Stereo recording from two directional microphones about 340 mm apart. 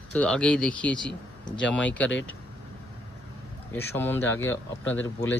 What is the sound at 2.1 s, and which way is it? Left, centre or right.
Speech, left.